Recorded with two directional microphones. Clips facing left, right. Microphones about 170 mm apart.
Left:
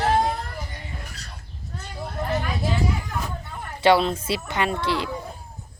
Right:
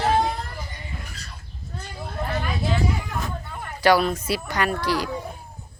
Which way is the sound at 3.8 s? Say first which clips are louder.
Left 1 dB; 25° left (ahead or behind).